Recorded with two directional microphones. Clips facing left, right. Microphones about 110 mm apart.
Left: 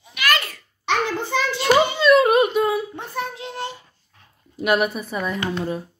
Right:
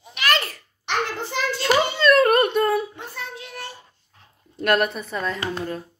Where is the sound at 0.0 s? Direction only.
35° right (ahead or behind).